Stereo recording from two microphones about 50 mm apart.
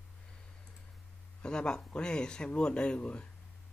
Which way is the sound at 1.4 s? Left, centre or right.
Centre.